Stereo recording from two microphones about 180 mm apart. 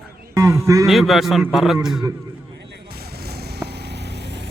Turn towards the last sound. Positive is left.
turn(degrees=-70)  # may be behind; listen again after turning